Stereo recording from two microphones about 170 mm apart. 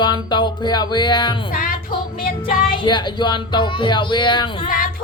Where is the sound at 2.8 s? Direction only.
25° left (ahead or behind).